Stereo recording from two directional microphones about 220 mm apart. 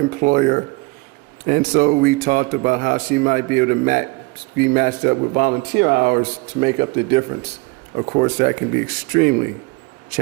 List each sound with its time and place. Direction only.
0.1 s a man's voice: 40° right (ahead or behind)